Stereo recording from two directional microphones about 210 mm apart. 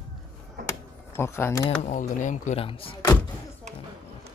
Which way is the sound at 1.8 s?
35° left (ahead or behind).